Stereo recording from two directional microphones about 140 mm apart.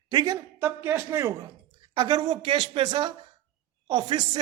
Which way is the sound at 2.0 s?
30° right (ahead or behind).